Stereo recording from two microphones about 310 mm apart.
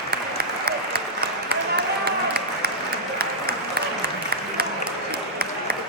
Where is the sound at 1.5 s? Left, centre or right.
Right.